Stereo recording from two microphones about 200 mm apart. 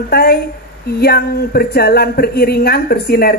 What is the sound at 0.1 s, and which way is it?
Speech, 50° left (ahead or behind).